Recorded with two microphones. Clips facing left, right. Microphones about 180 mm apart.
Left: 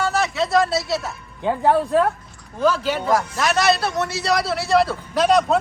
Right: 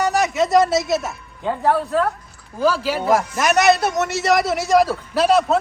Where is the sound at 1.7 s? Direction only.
15° left (ahead or behind).